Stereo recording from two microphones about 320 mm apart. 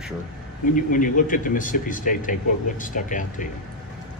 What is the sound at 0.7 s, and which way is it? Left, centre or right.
Speech, left.